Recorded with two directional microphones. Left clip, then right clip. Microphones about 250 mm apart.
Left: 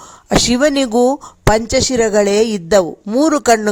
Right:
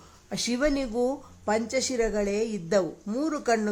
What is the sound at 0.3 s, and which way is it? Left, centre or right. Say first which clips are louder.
Speech: left 14 dB; left.